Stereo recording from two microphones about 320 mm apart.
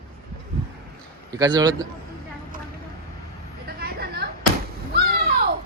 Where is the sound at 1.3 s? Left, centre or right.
Centre.